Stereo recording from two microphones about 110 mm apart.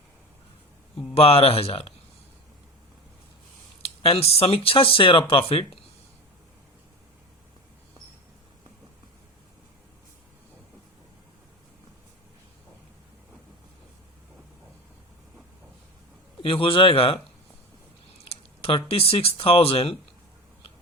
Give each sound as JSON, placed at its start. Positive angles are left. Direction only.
{"t": 1.1, "sound": "speech", "side_deg": 65}
{"t": 3.8, "sound": "speech", "side_deg": 60}
{"t": 16.4, "sound": "speech", "side_deg": 55}
{"t": 18.3, "sound": "speech", "side_deg": 60}